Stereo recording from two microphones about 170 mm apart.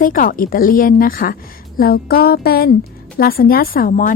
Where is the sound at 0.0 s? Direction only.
55° left (ahead or behind).